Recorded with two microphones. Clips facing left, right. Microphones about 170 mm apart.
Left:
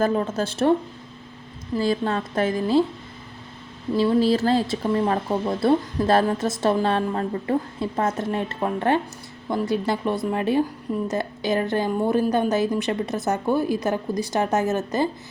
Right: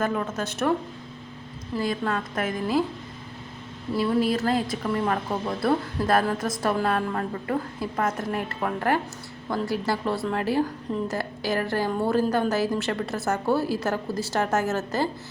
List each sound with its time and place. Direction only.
0.0 s speech: 30° left (ahead or behind)
1.8 s speech: 30° left (ahead or behind)
3.9 s speech: 30° left (ahead or behind)